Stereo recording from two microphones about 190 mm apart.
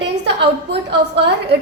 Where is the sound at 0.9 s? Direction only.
65° right (ahead or behind).